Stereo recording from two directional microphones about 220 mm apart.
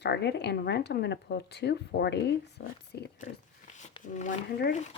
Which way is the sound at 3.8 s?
35° left (ahead or behind).